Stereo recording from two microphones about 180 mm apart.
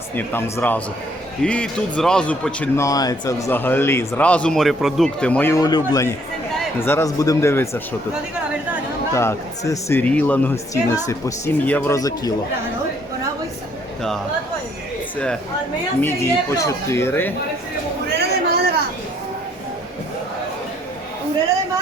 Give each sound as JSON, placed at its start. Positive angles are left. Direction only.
{"t": 0.2, "sound": "a man's voice", "side_deg": 15}
{"t": 9.1, "sound": "a man's voice", "side_deg": 15}
{"t": 16.0, "sound": "a man's voice", "side_deg": 15}
{"t": 18.1, "sound": "a sound", "side_deg": -65}